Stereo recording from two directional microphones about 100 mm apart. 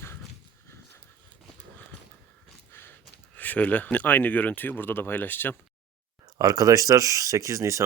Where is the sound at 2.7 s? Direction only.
20° left (ahead or behind).